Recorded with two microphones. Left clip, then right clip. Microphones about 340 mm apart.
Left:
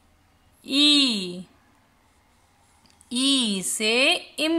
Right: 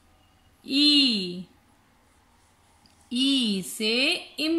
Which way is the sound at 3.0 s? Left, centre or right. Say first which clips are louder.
Left 2 dB; centre.